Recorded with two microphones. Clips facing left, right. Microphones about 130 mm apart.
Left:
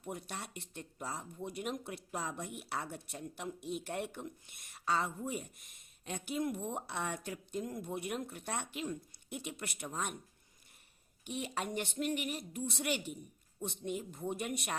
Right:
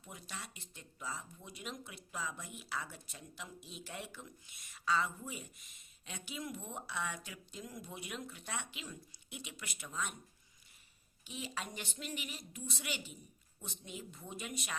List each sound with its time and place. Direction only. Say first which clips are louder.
0.0 s speech: left 7 dB; 55° left (ahead or behind)
11.2 s speech: left 5 dB; 55° left (ahead or behind)